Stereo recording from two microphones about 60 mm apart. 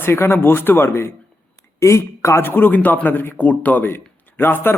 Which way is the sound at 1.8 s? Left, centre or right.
Left.